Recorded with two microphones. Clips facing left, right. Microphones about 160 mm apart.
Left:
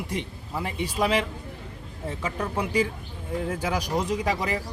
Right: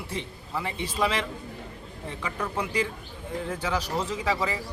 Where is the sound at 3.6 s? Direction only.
15° left (ahead or behind).